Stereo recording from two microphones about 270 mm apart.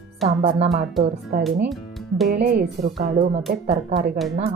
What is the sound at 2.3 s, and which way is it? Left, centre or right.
Speech, right.